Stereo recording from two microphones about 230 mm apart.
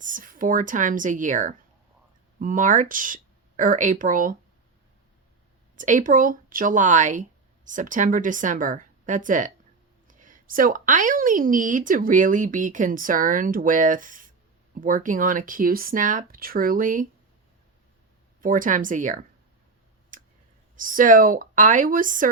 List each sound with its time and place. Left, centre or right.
0.0 s speech: right
5.7 s speech: right
18.4 s speech: right
20.1 s clicking: right
20.7 s speech: right